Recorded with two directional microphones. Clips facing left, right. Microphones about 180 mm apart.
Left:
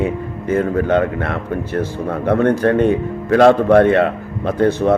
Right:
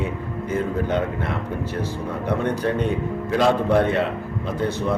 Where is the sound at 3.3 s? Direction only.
65° left (ahead or behind).